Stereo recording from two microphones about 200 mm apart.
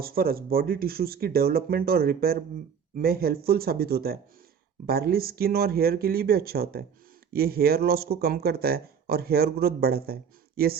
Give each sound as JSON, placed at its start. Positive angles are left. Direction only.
{"t": 0.0, "sound": "speech", "side_deg": -50}